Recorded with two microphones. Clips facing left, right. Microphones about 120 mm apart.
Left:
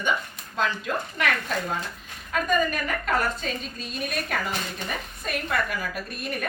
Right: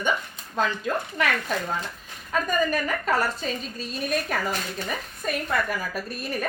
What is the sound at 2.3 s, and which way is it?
A woman's voice, 35° right (ahead or behind).